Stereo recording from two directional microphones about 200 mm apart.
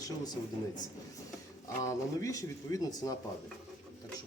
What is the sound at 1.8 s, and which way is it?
Speech, 15° left (ahead or behind).